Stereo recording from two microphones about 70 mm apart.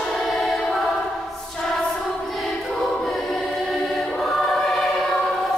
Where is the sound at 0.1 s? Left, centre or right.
Centre.